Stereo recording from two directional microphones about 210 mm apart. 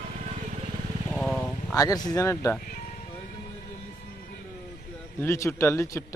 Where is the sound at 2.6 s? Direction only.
40° left (ahead or behind).